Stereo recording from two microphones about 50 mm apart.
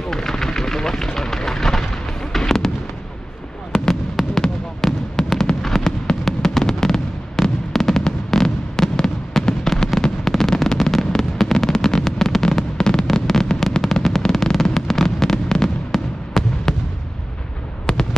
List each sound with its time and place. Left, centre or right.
0.0 s artillery fire: centre
2.3 s fireworks: centre
3.7 s fireworks: centre
17.9 s fireworks: centre